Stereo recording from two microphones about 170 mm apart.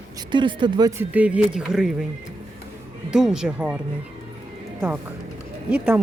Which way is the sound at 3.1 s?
5° right (ahead or behind).